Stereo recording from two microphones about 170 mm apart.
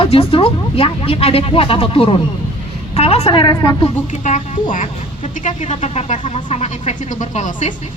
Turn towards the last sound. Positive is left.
turn(degrees=45)  # may be behind; listen again after turning